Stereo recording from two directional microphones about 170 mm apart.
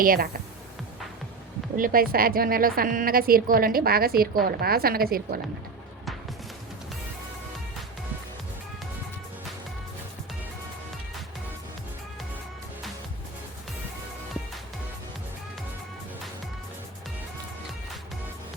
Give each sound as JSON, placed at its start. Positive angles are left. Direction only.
{"t": 0.0, "sound": "a woman's voice", "side_deg": -55}
{"t": 1.7, "sound": "a woman's voice", "side_deg": -55}